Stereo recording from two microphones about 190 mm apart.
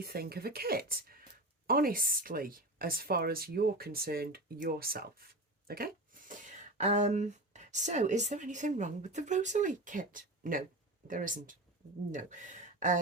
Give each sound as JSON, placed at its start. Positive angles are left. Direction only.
{"t": 0.0, "sound": "speech", "side_deg": -55}